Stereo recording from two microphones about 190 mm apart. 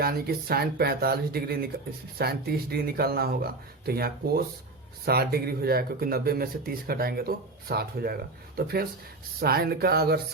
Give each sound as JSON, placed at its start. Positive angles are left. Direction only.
{"t": 0.0, "sound": "speech", "side_deg": -55}